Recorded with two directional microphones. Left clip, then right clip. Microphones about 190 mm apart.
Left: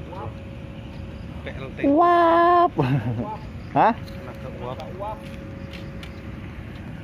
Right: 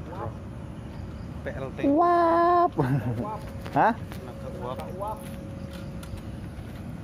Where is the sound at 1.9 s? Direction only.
10° left (ahead or behind).